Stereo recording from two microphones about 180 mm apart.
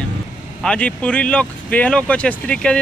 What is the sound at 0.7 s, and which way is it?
A man's voice, 5° left (ahead or behind).